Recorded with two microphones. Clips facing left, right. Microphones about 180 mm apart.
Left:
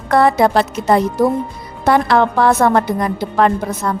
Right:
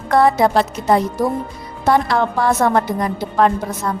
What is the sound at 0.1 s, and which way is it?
A woman's voice, 70° left (ahead or behind).